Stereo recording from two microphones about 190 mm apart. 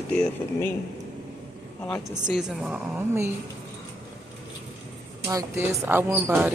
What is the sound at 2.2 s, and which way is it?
Speech, 5° right (ahead or behind).